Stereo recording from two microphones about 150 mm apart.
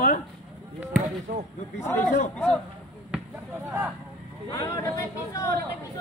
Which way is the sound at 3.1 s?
15° right (ahead or behind).